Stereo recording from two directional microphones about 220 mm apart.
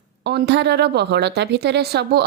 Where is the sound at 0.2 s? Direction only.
50° right (ahead or behind).